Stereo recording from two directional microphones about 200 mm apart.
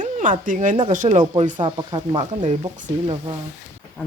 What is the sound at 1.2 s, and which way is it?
Speech, 30° right (ahead or behind).